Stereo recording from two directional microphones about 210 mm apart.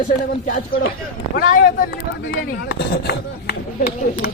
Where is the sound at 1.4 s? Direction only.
40° left (ahead or behind).